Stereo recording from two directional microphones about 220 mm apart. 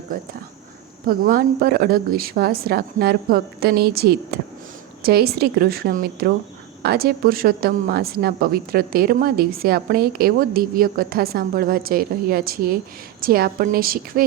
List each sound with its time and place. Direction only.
1.0 s a woman's voice: 40° right (ahead or behind)